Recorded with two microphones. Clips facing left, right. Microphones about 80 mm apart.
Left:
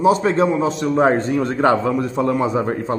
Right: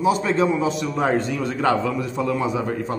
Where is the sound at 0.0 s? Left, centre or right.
Left.